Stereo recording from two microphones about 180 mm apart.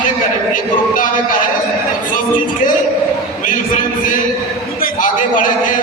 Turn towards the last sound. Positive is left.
turn(degrees=45)  # may be behind; listen again after turning